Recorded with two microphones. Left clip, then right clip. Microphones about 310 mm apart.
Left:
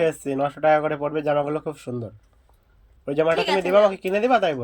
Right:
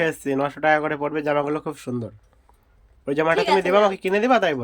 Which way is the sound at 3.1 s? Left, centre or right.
Centre.